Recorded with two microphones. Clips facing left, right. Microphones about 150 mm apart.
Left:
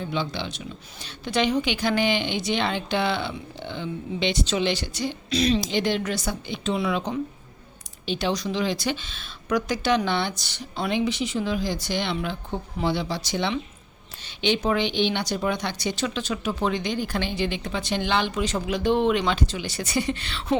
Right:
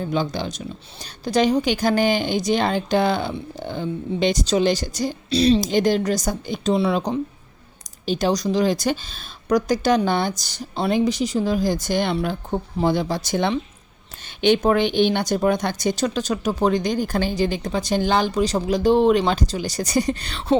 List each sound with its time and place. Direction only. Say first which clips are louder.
0.0 s a woman's voice: right 5 dB; 45° right (ahead or behind)